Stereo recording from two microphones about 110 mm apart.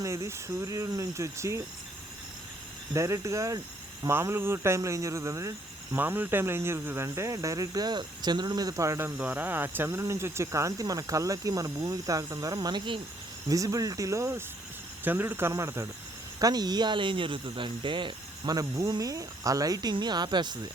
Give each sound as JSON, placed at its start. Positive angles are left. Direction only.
{"t": 0.0, "sound": "speech", "side_deg": -30}
{"t": 2.9, "sound": "speech", "side_deg": -25}
{"t": 9.1, "sound": "speech", "side_deg": -15}
{"t": 13.5, "sound": "speech", "side_deg": -30}
{"t": 18.5, "sound": "speech", "side_deg": -30}